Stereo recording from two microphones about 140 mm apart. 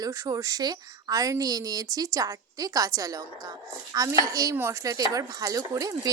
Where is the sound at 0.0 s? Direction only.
25° right (ahead or behind).